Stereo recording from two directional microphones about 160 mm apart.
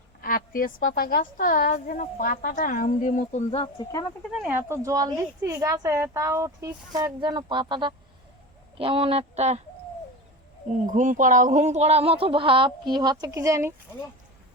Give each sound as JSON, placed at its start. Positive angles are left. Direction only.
{"t": 0.2, "sound": "a woman's voice", "side_deg": 65}
{"t": 3.5, "sound": "speech", "side_deg": 30}
{"t": 4.4, "sound": "a woman's voice", "side_deg": -15}
{"t": 10.8, "sound": "speech", "side_deg": -50}